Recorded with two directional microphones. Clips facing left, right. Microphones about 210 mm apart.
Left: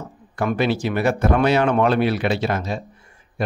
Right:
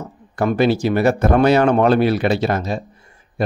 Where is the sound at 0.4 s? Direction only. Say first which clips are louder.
Right 4 dB; 40° right (ahead or behind).